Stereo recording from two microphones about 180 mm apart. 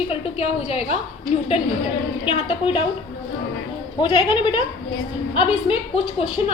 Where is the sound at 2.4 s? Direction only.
30° left (ahead or behind).